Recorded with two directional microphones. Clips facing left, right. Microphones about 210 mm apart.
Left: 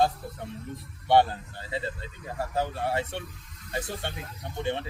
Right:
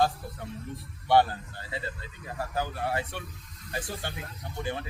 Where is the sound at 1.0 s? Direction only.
25° left (ahead or behind).